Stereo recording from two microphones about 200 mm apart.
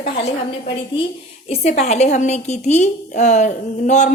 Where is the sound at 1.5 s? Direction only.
35° left (ahead or behind).